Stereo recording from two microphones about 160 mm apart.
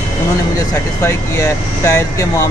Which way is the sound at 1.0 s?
15° left (ahead or behind).